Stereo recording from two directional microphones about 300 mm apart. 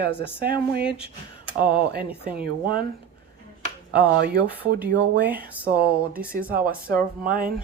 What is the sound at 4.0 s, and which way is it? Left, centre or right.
Speech, right.